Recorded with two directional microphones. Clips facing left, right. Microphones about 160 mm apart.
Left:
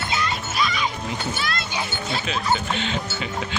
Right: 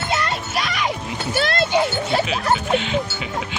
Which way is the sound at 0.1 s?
65° right (ahead or behind).